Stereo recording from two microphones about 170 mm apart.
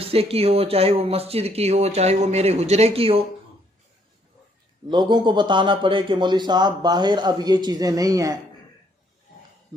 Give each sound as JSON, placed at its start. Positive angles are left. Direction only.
{"t": 0.0, "sound": "speech", "side_deg": -35}
{"t": 4.9, "sound": "speech", "side_deg": -25}